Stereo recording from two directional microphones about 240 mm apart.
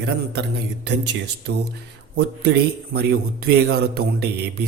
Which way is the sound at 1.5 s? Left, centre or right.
Right.